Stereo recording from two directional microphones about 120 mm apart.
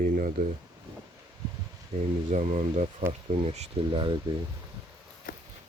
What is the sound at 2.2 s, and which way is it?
Speech, 80° right.